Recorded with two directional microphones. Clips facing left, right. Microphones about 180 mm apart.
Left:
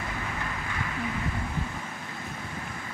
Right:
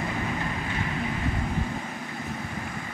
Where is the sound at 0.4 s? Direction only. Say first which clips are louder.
Right 4 dB; 25° right (ahead or behind).